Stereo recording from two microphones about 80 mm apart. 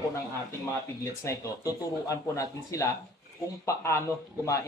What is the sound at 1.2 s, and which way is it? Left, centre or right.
A man's voice, left.